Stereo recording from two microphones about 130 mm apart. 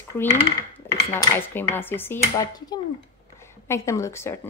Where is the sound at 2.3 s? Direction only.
30° left (ahead or behind).